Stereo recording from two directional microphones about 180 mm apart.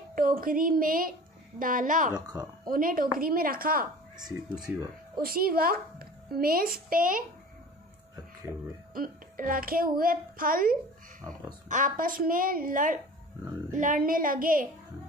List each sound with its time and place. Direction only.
0.1 s a woman's voice: 50° right (ahead or behind)
4.6 s speech: 5° right (ahead or behind)
5.2 s a child's voice: 55° right (ahead or behind)
8.9 s a child's voice: 50° right (ahead or behind)